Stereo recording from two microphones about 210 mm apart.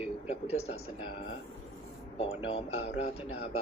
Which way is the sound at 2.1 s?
30° left (ahead or behind).